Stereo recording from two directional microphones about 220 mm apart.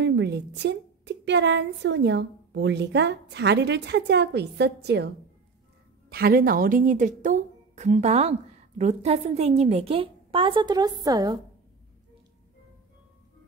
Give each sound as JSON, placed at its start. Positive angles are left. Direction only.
{"t": 0.0, "sound": "a woman's voice", "side_deg": -50}